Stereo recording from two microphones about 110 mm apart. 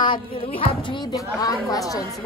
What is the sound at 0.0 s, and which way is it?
Speech, 50° left (ahead or behind).